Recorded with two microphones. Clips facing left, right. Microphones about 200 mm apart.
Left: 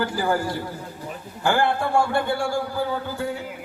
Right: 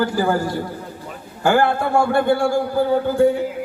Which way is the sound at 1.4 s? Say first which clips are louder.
Right 5 dB; 45° right (ahead or behind).